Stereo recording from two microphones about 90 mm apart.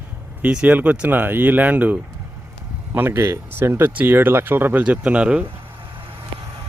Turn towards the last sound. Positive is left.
turn(degrees=-10)  # may be behind; listen again after turning